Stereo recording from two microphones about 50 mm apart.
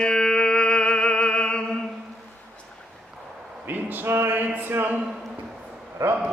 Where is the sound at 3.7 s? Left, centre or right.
Right.